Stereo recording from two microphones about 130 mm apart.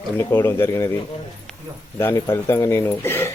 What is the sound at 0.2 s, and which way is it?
Speech, 15° left (ahead or behind).